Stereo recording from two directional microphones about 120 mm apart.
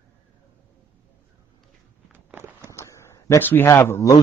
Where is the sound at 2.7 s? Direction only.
25° left (ahead or behind).